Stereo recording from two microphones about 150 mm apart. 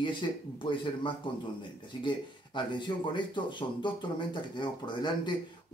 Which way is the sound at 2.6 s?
30° left (ahead or behind).